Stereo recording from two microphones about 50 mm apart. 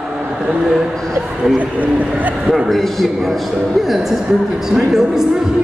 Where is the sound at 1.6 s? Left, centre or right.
Right.